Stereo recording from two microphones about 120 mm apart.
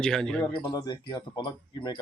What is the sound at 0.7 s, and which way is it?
Speech, 35° left (ahead or behind).